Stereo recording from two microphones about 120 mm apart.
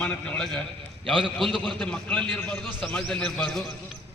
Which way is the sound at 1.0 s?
45° right (ahead or behind).